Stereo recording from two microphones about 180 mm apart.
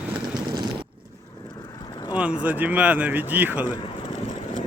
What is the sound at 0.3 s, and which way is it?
Vehicle, 25° right (ahead or behind).